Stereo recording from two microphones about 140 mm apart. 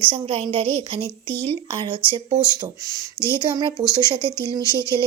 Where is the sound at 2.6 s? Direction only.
25° right (ahead or behind).